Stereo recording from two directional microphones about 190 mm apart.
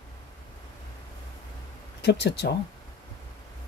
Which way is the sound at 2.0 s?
60° left (ahead or behind).